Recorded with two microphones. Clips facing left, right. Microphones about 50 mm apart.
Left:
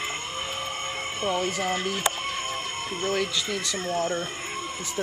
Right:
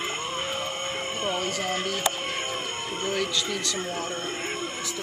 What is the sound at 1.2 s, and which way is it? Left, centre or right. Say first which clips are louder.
Speech: left 3 dB; centre.